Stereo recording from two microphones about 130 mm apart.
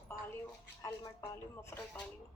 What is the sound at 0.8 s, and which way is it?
Speech, 25° left (ahead or behind).